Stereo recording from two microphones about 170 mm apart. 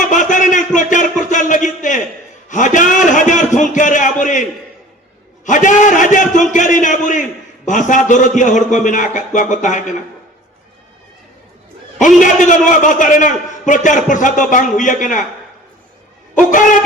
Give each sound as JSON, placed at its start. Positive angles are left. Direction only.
{"t": 0.0, "sound": "a sound", "side_deg": 50}
{"t": 1.3, "sound": "music", "side_deg": 45}
{"t": 2.5, "sound": "a sound", "side_deg": 45}
{"t": 5.5, "sound": "a man's voice", "side_deg": 50}
{"t": 11.9, "sound": "a man's voice", "side_deg": 50}
{"t": 16.3, "sound": "a man's voice", "side_deg": 50}